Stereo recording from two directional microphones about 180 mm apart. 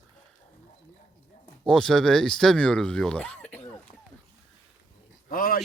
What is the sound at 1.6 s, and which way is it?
Speech, 5° left (ahead or behind).